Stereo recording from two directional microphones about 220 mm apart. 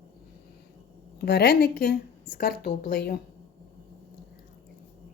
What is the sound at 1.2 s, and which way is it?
A woman's voice, 45° left (ahead or behind).